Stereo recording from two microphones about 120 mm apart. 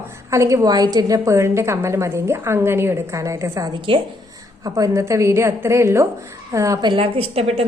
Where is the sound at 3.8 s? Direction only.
45° right (ahead or behind).